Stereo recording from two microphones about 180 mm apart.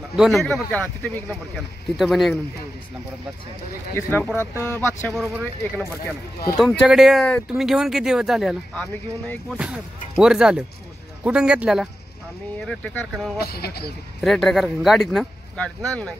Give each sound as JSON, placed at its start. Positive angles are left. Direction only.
{"t": 0.1, "sound": "speech", "side_deg": 0}
{"t": 3.9, "sound": "speech", "side_deg": 10}
{"t": 4.6, "sound": "speech", "side_deg": -15}
{"t": 5.0, "sound": "speech", "side_deg": 0}
{"t": 12.5, "sound": "speech", "side_deg": 5}
{"t": 13.4, "sound": "speech", "side_deg": 60}
{"t": 14.2, "sound": "speech", "side_deg": 0}